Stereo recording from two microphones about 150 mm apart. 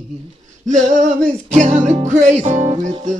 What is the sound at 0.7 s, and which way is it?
Music, 55° right (ahead or behind).